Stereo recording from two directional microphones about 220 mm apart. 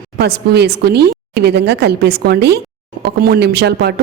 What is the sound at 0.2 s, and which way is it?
A woman's voice, 50° right (ahead or behind).